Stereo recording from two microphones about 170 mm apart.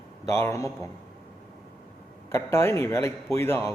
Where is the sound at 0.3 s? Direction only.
15° left (ahead or behind).